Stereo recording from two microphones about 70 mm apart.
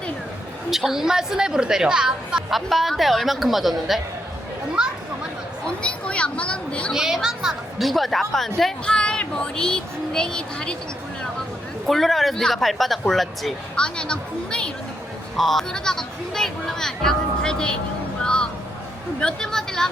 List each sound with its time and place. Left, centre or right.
0.7 s a woman's voice: centre
5.6 s a woman's voice: centre
6.9 s a woman's voice: centre
11.9 s a woman's voice: centre
13.7 s a woman's voice: centre
15.4 s a woman's voice: centre
18.2 s music: centre
19.2 s a woman's voice: centre